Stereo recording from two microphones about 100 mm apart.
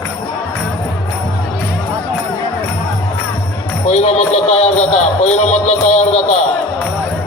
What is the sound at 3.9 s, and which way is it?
Speech, 90° left.